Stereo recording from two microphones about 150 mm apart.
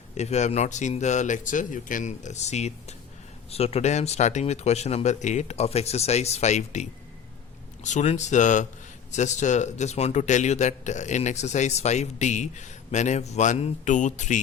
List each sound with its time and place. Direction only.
0.1 s speech: 50° left (ahead or behind)
7.9 s speech: 50° left (ahead or behind)